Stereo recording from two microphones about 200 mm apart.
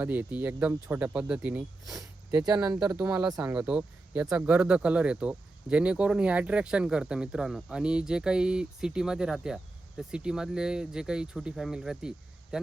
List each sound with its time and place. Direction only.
0.0 s speech: 10° right (ahead or behind)
2.5 s speech: 15° right (ahead or behind)
2.8 s speech: 5° right (ahead or behind)